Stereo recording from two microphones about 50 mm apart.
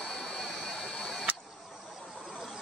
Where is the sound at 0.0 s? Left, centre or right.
Centre.